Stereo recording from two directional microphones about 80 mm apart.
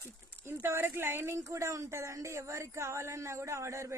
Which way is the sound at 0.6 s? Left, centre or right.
Right.